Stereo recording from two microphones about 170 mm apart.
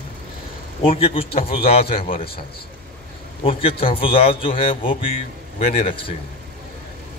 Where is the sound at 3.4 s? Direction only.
35° left (ahead or behind).